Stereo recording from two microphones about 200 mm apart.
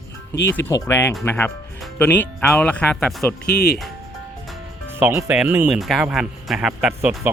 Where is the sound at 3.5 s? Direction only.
55° left (ahead or behind).